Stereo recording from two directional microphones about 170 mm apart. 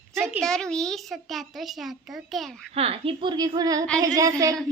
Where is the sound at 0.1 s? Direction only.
15° right (ahead or behind).